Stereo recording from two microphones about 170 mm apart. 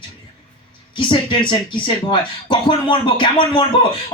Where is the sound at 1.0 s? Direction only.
30° left (ahead or behind).